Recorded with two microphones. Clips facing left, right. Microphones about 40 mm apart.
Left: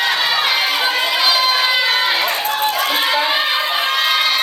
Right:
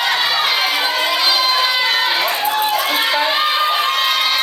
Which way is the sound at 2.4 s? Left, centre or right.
Centre.